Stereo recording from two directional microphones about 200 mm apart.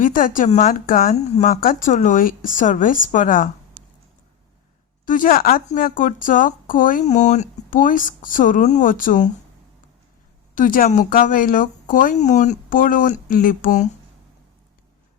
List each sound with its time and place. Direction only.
0.0 s speech: 45° left (ahead or behind)
5.0 s speech: 40° left (ahead or behind)
10.5 s speech: 40° left (ahead or behind)